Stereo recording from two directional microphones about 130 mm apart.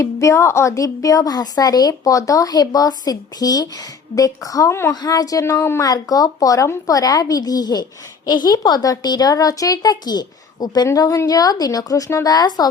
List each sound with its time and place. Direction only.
0.0 s speech: 25° left (ahead or behind)